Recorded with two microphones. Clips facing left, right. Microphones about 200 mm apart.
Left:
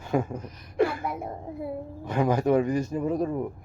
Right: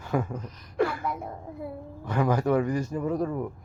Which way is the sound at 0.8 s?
25° left (ahead or behind).